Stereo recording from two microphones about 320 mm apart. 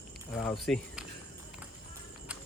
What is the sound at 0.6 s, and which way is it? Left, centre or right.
Speech, centre.